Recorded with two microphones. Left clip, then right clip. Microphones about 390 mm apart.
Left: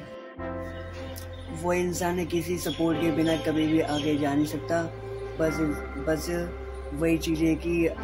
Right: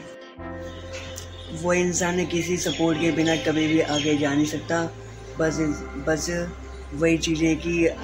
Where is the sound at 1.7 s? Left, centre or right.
Left.